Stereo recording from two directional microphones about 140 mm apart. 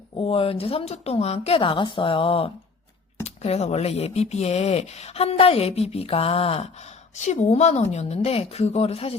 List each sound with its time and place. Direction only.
0.2 s speech: 40° left (ahead or behind)
3.2 s speech: 50° left (ahead or behind)